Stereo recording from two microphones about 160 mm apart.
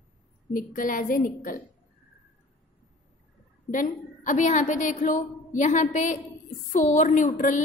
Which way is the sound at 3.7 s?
55° left (ahead or behind).